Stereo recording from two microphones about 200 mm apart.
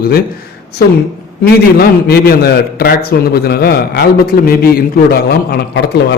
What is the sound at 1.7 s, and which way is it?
A man's voice, 50° left (ahead or behind).